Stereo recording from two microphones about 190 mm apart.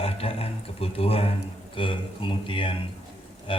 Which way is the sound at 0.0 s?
30° left (ahead or behind).